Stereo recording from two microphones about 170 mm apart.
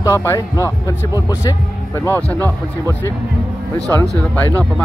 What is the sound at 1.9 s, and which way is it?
Speech, 15° left (ahead or behind).